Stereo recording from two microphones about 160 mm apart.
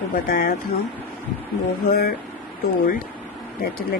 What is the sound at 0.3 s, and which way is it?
Speech, 70° left (ahead or behind).